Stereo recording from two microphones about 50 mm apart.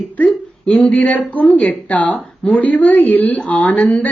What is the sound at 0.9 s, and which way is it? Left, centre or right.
A woman's voice, left.